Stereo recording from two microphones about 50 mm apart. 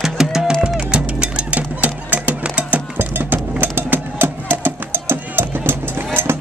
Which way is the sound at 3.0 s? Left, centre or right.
Right.